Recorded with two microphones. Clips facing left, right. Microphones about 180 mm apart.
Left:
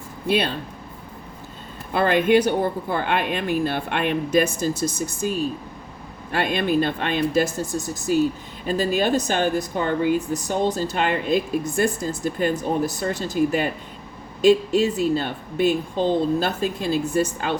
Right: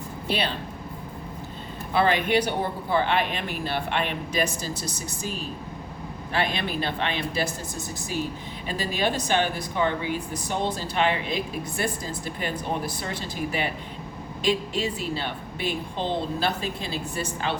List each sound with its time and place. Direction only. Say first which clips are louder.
1.9 s speech: left 5 dB; 50° left (ahead or behind)
6.3 s speech: left 6 dB; 50° left (ahead or behind)